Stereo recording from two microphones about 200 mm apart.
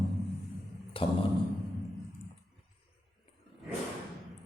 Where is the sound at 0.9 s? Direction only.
25° left (ahead or behind).